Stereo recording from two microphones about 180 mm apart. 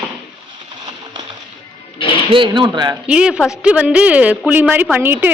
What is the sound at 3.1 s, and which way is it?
A woman's voice, 5° right (ahead or behind).